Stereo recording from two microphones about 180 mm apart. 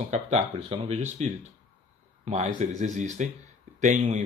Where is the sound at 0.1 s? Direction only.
40° right (ahead or behind).